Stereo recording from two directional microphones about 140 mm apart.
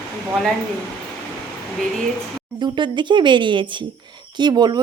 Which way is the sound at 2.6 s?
35° right (ahead or behind).